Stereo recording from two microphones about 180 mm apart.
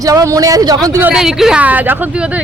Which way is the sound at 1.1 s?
Centre (ahead or behind).